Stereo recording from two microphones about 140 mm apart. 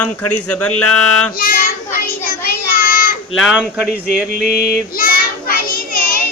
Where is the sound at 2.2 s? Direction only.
90° left.